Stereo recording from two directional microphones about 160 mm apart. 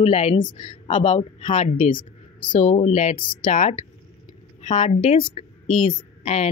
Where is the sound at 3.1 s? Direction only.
30° left (ahead or behind).